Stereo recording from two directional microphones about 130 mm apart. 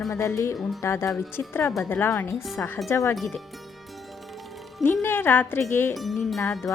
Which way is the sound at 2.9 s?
20° left (ahead or behind).